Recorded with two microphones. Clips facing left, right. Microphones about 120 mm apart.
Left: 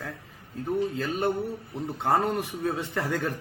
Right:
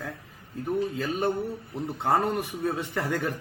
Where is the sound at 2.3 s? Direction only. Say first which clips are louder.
Even; 10° right (ahead or behind).